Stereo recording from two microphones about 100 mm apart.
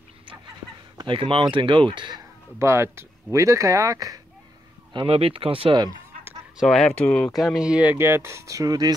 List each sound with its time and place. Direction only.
0.9 s speech: 55° right (ahead or behind)
2.6 s speech: 25° right (ahead or behind)
4.9 s speech: 65° right (ahead or behind)
6.6 s speech: 5° left (ahead or behind)
7.3 s speech: 5° right (ahead or behind); by 8.9 s 40° right (ahead or behind)